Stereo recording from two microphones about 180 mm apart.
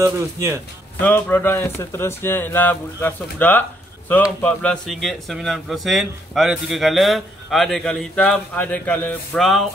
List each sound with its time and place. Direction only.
0.0 s speech: 15° right (ahead or behind)
1.0 s a man's voice: 10° left (ahead or behind)